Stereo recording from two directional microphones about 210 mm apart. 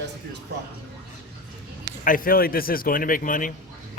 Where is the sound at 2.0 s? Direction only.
40° left (ahead or behind).